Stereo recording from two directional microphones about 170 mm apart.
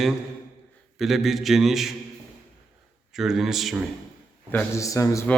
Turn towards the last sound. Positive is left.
turn(degrees=20)  # may be behind; listen again after turning